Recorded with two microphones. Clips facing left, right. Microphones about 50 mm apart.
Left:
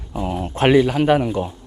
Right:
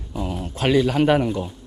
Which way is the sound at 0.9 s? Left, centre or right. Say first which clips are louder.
Left 1 dB; centre.